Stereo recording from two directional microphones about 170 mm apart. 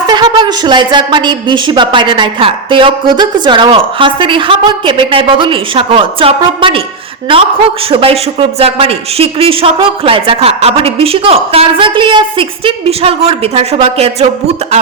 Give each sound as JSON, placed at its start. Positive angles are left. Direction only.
{"t": 0.1, "sound": "a woman's voice", "side_deg": -25}
{"t": 7.9, "sound": "a woman's voice", "side_deg": -35}